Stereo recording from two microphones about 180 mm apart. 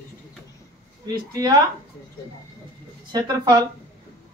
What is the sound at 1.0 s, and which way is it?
Speech, 20° right (ahead or behind).